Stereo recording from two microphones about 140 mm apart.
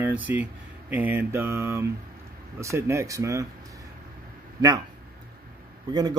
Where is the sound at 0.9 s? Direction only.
15° right (ahead or behind).